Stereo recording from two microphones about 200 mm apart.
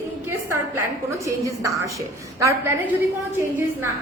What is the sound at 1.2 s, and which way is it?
A woman's voice, 15° right (ahead or behind).